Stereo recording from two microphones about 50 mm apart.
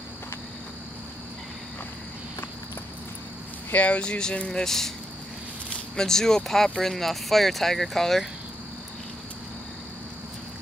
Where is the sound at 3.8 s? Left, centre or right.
Left; by 8.2 s centre.